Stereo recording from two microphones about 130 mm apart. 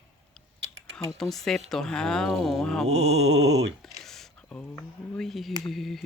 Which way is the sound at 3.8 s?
Centre (ahead or behind).